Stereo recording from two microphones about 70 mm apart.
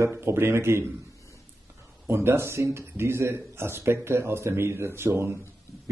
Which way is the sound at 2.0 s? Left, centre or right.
Right.